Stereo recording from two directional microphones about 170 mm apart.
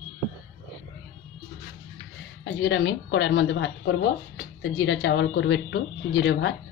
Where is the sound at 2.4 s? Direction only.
90° left.